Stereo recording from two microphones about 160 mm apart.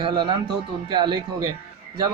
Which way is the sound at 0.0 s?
30° right (ahead or behind).